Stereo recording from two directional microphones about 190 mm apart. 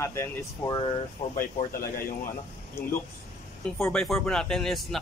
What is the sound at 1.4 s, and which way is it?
Speech, 45° left (ahead or behind).